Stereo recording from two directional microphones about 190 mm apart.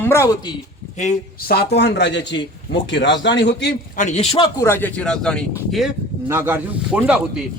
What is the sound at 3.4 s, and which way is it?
Speech, 60° left (ahead or behind).